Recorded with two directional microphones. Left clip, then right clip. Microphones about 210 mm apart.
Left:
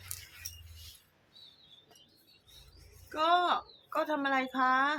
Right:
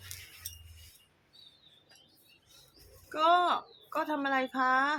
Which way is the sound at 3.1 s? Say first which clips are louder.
Right 2 dB; 10° right (ahead or behind).